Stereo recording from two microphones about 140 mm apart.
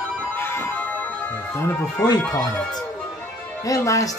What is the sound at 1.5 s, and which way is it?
Speech, 15° left (ahead or behind).